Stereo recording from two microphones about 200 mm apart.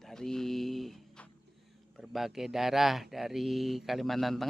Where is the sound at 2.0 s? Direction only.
Centre (ahead or behind).